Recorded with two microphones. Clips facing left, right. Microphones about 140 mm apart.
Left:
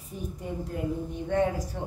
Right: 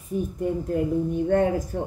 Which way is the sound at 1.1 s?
50° right (ahead or behind).